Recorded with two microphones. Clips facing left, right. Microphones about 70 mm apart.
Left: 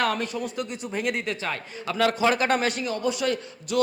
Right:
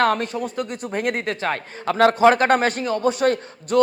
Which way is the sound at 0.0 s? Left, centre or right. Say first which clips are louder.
Right 6 dB; right.